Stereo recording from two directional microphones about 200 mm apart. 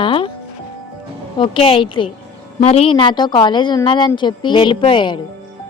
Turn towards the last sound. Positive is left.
turn(degrees=25)  # may be behind; listen again after turning